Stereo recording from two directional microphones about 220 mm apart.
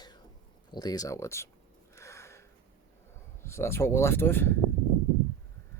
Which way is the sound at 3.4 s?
10° left (ahead or behind).